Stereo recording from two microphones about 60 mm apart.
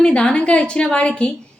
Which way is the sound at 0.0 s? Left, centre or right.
Centre.